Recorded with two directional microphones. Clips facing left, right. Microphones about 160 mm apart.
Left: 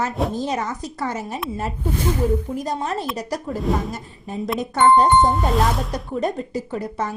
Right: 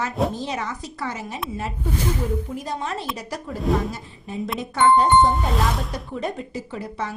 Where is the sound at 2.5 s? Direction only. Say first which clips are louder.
Left 4 dB; 40° left (ahead or behind).